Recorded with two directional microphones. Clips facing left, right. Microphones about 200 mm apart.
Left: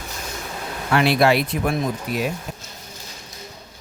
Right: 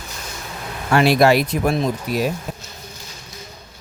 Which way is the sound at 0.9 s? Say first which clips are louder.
Right 3 dB; 40° right (ahead or behind).